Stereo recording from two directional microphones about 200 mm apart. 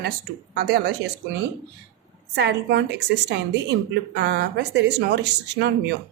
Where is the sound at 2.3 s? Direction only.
55° right (ahead or behind).